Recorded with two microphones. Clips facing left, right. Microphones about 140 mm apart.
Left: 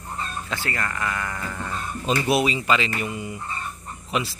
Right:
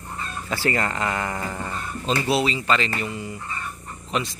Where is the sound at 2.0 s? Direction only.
15° left (ahead or behind).